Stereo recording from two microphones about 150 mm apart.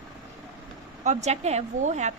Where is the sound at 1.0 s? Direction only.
50° right (ahead or behind).